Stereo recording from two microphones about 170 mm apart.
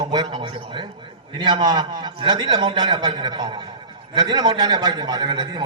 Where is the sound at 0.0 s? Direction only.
25° right (ahead or behind).